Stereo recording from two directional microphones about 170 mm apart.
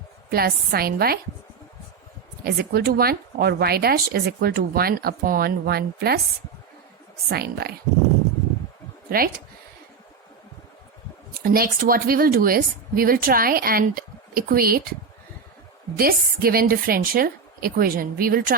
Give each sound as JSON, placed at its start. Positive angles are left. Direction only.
{"t": 0.3, "sound": "speech", "side_deg": -65}
{"t": 2.4, "sound": "speech", "side_deg": -65}
{"t": 7.3, "sound": "speech", "side_deg": -65}
{"t": 9.0, "sound": "speech", "side_deg": -60}
{"t": 11.4, "sound": "speech", "side_deg": -60}
{"t": 16.0, "sound": "speech", "side_deg": -60}